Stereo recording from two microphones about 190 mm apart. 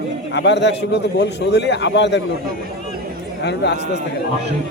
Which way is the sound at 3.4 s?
65° left (ahead or behind).